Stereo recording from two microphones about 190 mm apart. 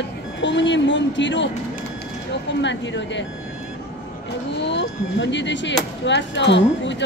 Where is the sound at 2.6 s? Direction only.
70° left (ahead or behind).